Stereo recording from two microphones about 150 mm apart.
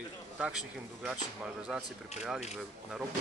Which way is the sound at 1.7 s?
5° left (ahead or behind).